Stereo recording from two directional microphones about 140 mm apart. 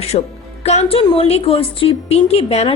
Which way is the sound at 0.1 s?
45° left (ahead or behind).